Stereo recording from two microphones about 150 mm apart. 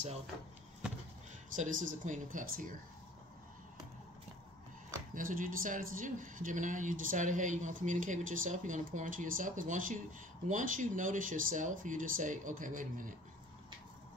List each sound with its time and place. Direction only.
1.5 s speech: 60° right (ahead or behind)
5.1 s speech: 65° right (ahead or behind)